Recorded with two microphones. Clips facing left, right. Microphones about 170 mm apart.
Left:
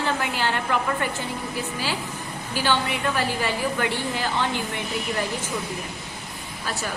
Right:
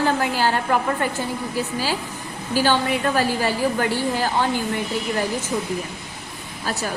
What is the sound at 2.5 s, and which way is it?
A woman's voice, 40° right (ahead or behind).